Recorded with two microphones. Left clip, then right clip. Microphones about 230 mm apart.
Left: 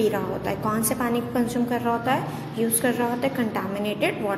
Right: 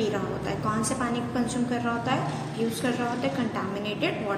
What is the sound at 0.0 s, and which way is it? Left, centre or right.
A woman's voice, left.